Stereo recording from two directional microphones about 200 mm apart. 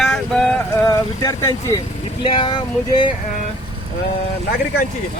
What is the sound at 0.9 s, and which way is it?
Speech, 15° left (ahead or behind).